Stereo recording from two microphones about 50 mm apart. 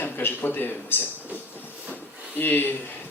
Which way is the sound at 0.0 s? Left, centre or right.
Left.